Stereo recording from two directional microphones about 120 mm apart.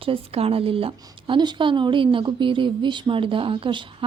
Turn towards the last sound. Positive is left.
turn(degrees=-45)  # may be behind; listen again after turning